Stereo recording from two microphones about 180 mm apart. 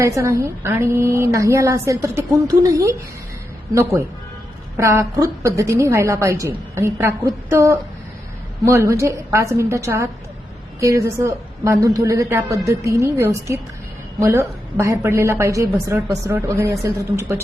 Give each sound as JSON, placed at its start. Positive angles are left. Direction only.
{"t": 0.0, "sound": "a woman's voice", "side_deg": -15}
{"t": 4.8, "sound": "a woman's voice", "side_deg": -15}